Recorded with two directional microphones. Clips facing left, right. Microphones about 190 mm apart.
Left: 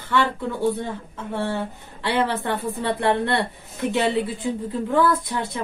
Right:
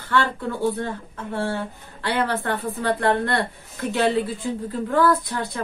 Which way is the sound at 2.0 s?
20° left (ahead or behind).